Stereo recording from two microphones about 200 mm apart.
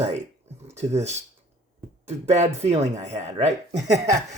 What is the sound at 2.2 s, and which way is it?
Speech, 35° right (ahead or behind).